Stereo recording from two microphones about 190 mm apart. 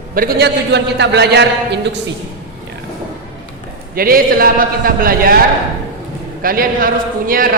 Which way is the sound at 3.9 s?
50° right (ahead or behind).